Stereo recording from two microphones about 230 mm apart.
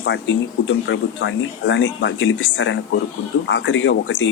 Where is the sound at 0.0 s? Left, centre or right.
Left.